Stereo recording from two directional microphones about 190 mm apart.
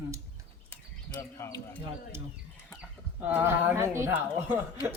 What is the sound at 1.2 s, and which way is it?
Speech, 15° left (ahead or behind).